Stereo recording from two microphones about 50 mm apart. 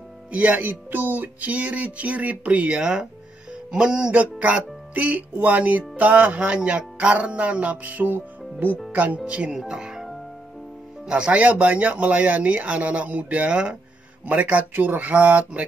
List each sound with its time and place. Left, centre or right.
0.3 s music: right
2.8 s speech: centre
7.2 s music: right
8.9 s speech: right
9.5 s speech: centre
11.1 s speech: centre
14.2 s music: right